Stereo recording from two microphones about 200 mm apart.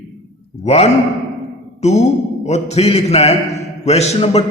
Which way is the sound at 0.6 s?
35° left (ahead or behind).